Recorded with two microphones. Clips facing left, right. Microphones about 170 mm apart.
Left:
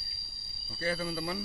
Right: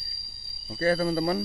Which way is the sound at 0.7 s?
50° right (ahead or behind).